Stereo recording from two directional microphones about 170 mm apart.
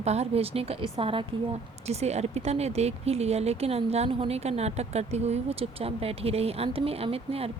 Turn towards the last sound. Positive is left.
turn(degrees=-35)  # may be behind; listen again after turning